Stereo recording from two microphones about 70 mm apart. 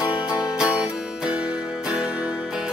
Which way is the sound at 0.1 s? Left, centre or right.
Centre.